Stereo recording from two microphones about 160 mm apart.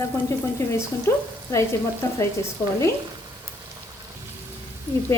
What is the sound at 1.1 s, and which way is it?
Speech, 20° left (ahead or behind).